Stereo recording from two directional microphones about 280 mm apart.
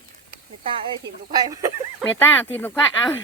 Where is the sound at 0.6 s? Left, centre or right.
Centre.